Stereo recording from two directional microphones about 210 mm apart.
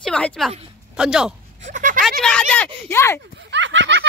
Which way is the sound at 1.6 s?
40° right (ahead or behind).